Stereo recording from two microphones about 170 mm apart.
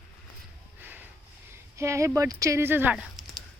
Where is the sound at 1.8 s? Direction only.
15° right (ahead or behind).